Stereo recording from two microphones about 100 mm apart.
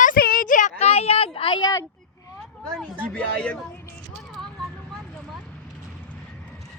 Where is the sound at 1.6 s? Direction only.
40° left (ahead or behind).